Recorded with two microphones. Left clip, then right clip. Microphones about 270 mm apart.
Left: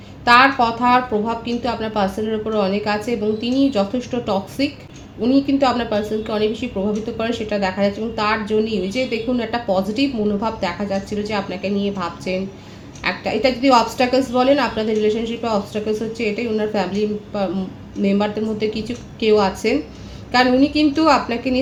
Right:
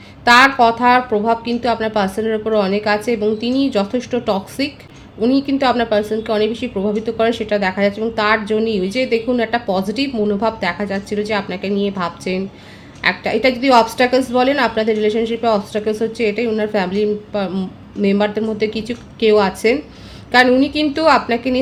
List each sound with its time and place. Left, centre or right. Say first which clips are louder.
0.3 s a woman's voice: right 3 dB; right